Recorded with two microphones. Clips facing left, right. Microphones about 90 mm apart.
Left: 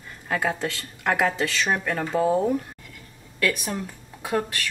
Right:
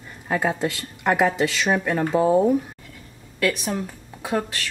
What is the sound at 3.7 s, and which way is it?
Speech, 15° right (ahead or behind).